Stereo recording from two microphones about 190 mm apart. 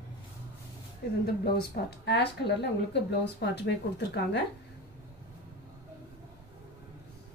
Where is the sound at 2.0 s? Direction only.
60° left (ahead or behind).